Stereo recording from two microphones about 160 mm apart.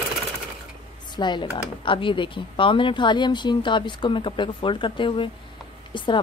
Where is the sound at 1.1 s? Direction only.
30° left (ahead or behind).